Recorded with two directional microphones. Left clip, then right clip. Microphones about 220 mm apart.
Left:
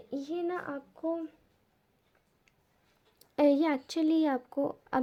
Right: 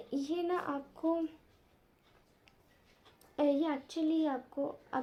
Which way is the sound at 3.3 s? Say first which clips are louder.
Left 6 dB; 40° left (ahead or behind).